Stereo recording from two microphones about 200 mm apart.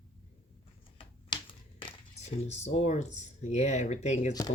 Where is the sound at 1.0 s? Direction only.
25° left (ahead or behind).